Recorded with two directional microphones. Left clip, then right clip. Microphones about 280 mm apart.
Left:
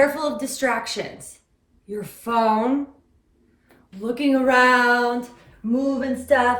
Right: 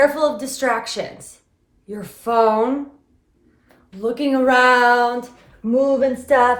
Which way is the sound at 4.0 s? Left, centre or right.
Centre.